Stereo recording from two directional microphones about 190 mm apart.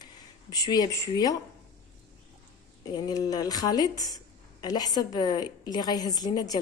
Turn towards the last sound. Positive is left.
turn(degrees=20)  # may be behind; listen again after turning